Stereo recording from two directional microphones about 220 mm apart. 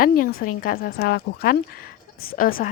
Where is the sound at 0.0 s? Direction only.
40° left (ahead or behind).